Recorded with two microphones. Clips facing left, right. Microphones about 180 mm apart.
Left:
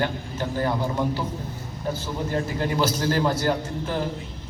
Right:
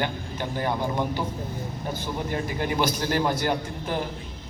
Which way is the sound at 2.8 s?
15° right (ahead or behind).